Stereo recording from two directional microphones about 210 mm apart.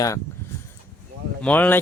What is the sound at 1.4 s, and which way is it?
Speech, 10° left (ahead or behind).